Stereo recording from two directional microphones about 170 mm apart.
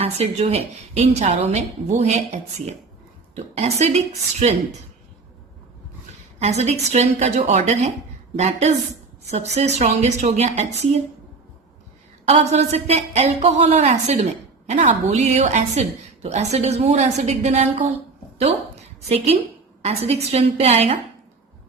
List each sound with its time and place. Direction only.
0.0 s a woman's voice: 35° right (ahead or behind)
6.4 s a woman's voice: 40° right (ahead or behind)
12.3 s a woman's voice: 40° right (ahead or behind)
19.0 s a woman's voice: 40° right (ahead or behind)